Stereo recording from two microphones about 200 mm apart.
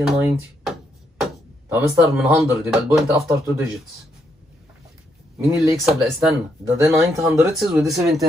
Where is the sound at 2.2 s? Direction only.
Centre (ahead or behind).